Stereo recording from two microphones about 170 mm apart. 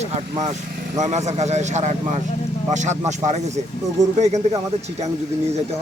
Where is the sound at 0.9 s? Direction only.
45° right (ahead or behind).